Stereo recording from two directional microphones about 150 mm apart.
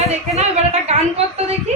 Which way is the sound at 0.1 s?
45° right (ahead or behind).